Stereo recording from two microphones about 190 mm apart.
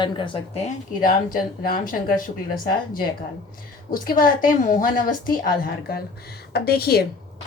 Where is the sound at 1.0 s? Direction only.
50° left (ahead or behind).